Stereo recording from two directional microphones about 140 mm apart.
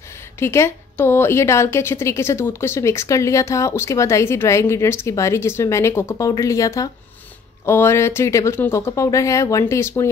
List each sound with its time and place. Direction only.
0.4 s a woman's voice: 20° left (ahead or behind)